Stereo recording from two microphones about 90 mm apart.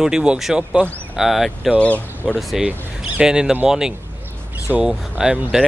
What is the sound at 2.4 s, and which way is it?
Speech, centre (ahead or behind).